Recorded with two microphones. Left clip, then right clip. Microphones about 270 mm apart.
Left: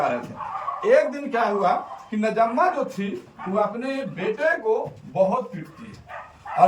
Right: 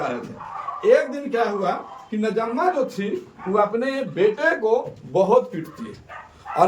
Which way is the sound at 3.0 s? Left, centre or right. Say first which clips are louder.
Right 3 dB; centre.